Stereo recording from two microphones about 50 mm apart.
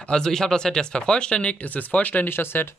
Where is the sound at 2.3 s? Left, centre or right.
Left.